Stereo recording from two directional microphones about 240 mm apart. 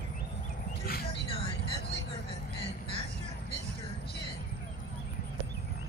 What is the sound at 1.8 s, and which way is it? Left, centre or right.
Vehicle, left.